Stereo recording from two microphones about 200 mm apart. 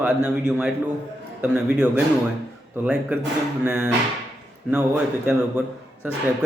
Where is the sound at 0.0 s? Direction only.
5° right (ahead or behind).